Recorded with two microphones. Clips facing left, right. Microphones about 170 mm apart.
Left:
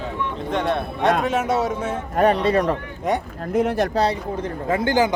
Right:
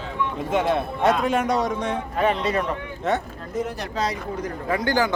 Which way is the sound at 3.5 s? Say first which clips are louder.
Left 8 dB; 65° left (ahead or behind).